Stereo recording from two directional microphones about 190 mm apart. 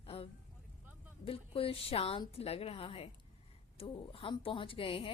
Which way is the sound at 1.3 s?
30° left (ahead or behind).